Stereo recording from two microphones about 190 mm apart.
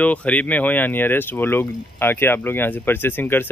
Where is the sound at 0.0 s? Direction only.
5° left (ahead or behind).